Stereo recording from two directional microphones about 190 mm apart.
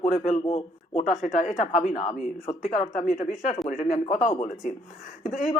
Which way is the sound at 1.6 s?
45° left (ahead or behind).